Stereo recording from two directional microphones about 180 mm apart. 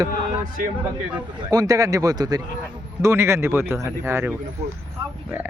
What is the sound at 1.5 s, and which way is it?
Speech, 20° right (ahead or behind).